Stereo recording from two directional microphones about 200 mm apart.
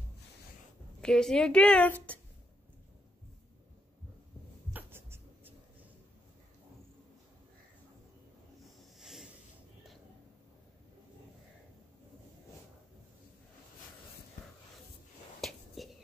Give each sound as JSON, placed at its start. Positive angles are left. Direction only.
{"t": 1.0, "sound": "a woman's voice", "side_deg": 5}
{"t": 4.7, "sound": "writing", "side_deg": -10}
{"t": 9.0, "sound": "snort", "side_deg": 0}
{"t": 15.4, "sound": "whispering", "side_deg": 0}